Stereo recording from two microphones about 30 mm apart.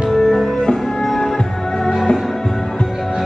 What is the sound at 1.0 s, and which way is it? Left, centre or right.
Music, centre.